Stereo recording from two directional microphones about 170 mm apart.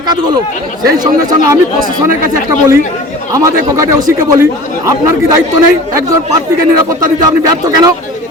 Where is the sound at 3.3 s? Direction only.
20° right (ahead or behind).